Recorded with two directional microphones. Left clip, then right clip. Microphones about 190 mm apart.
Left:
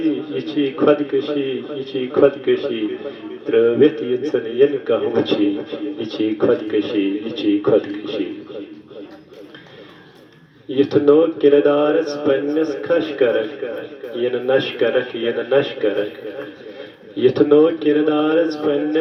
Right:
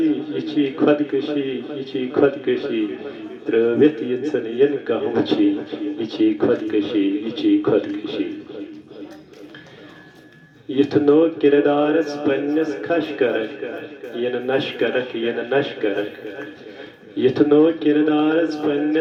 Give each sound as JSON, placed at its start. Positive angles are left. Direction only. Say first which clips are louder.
{"t": 0.0, "sound": "a man's voice", "louder": "even", "side_deg": 20}
{"t": 10.7, "sound": "a man's voice", "louder": "left 2 dB", "side_deg": 20}
{"t": 17.2, "sound": "a man's voice", "louder": "left 2 dB", "side_deg": 20}